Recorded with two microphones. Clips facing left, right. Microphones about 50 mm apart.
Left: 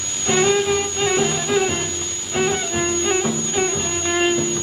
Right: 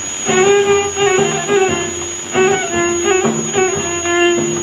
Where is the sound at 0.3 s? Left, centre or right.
Right.